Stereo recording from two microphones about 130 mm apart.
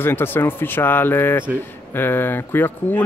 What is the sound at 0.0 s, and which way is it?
Speech, 15° left (ahead or behind).